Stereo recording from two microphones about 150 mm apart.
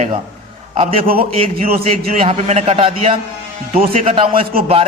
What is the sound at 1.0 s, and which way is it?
Speech, 80° right.